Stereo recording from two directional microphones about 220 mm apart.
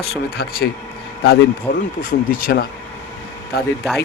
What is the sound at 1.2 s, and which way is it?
Speech, 45° left (ahead or behind).